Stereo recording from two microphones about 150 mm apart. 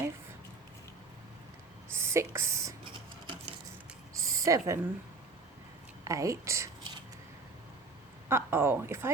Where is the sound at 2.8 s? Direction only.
35° right (ahead or behind).